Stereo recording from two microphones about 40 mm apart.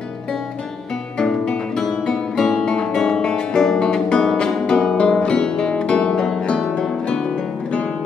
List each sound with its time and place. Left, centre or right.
1.1 s music: centre
2.3 s music: centre
2.6 s guitar: left
2.9 s music: centre